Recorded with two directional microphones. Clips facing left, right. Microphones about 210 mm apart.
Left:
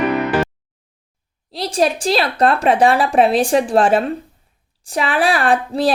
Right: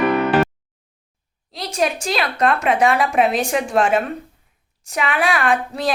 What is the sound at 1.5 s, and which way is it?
A woman's voice, 35° left (ahead or behind).